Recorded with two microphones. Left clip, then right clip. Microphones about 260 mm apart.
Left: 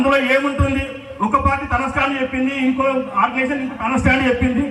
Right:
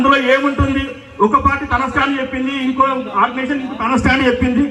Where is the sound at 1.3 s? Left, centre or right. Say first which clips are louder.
Even; centre.